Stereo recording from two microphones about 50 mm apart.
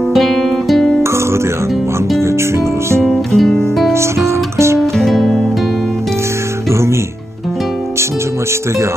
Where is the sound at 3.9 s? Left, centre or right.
Right.